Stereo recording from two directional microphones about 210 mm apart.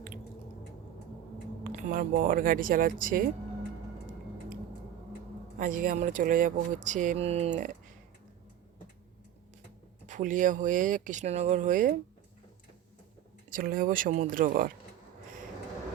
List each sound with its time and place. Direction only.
1.6 s speech: 40° right (ahead or behind)
5.5 s speech: 40° right (ahead or behind)
10.1 s speech: 35° right (ahead or behind)
13.5 s speech: 40° right (ahead or behind)